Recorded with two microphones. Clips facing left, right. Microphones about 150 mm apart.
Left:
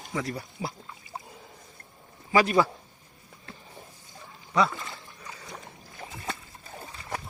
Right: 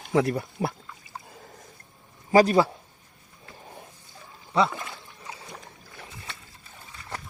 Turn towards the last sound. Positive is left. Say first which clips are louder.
# left 6 dB
turn(degrees=40)  # may be behind; listen again after turning